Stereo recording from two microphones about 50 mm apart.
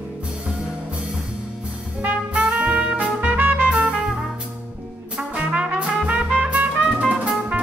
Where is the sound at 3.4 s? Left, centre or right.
Right.